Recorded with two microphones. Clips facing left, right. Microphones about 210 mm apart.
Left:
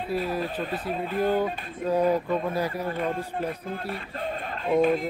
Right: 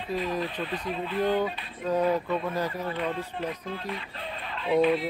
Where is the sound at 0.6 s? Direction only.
45° left (ahead or behind).